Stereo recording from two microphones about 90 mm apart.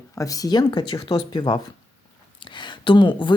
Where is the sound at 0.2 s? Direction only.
40° left (ahead or behind).